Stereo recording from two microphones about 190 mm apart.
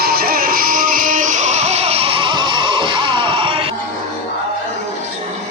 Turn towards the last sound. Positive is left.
turn(degrees=-25)  # may be behind; listen again after turning